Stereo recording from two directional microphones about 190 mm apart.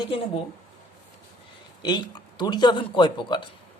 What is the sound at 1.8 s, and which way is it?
Speech, 20° left (ahead or behind).